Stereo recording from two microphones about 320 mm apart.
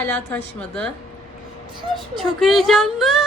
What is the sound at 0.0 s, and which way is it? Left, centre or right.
Speech, centre.